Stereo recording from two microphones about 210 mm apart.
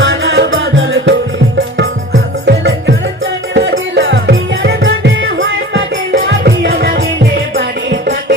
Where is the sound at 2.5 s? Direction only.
55° right (ahead or behind).